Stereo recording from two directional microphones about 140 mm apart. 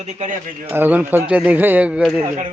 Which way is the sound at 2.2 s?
55° right (ahead or behind).